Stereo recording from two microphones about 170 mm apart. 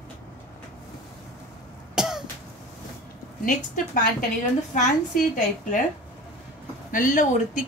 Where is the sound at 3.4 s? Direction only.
50° left (ahead or behind).